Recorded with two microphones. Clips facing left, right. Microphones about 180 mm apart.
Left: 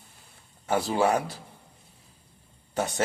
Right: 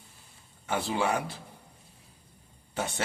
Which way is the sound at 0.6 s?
40° left (ahead or behind).